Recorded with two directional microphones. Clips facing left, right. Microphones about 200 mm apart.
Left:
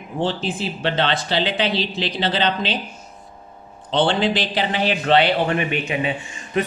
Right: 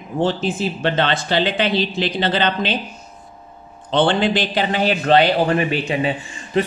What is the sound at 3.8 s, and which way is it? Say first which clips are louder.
A man's voice: right 2 dB; 50° right (ahead or behind).